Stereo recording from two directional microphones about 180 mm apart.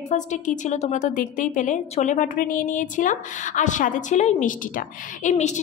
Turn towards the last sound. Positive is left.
turn(degrees=40)  # may be behind; listen again after turning